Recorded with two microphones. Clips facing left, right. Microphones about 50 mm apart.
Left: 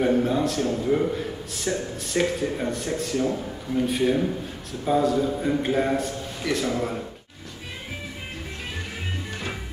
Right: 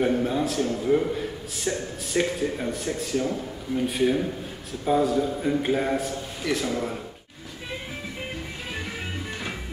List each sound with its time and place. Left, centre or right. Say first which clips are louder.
0.0 s a man's voice: left 2 dB; centre